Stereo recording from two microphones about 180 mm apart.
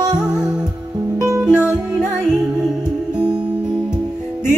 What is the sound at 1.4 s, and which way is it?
Music, 5° right (ahead or behind).